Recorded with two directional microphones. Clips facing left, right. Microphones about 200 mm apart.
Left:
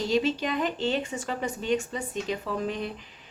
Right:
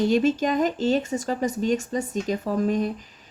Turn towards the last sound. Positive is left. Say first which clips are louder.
# right 7 dB
turn(degrees=-45)  # may be behind; listen again after turning